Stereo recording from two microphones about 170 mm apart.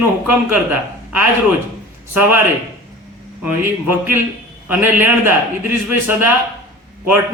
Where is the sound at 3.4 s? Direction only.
10° right (ahead or behind).